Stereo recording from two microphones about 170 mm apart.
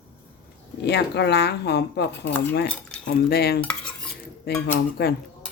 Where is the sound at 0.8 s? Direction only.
80° left.